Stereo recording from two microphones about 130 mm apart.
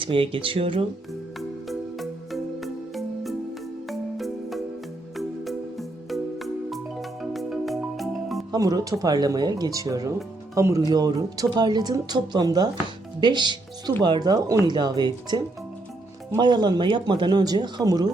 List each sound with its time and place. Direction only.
0.0 s speech: 40° right (ahead or behind)
1.4 s music: centre (ahead or behind)
8.5 s speech: 30° right (ahead or behind)